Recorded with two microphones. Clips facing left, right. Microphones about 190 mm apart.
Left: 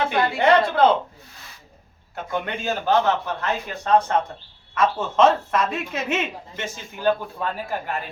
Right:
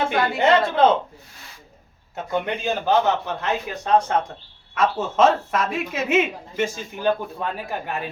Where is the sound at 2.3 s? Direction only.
15° right (ahead or behind).